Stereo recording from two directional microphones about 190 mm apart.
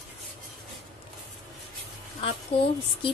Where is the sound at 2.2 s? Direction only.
30° left (ahead or behind).